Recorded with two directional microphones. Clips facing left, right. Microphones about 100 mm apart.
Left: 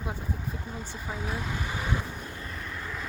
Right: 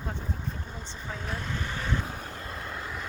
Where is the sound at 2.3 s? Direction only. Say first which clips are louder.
Right 1 dB; 40° right (ahead or behind).